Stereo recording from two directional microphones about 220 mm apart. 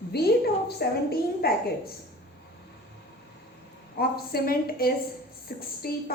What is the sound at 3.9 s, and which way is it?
A woman's voice, 45° left (ahead or behind).